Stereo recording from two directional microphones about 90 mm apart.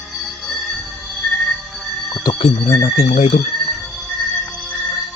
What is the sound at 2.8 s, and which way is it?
Speech, 90° left.